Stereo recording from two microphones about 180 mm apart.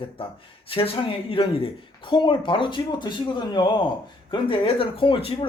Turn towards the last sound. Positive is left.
turn(degrees=30)  # may be behind; listen again after turning